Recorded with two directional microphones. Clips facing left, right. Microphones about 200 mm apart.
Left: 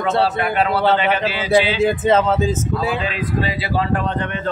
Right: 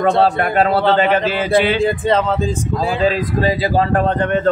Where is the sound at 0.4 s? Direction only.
45° right (ahead or behind).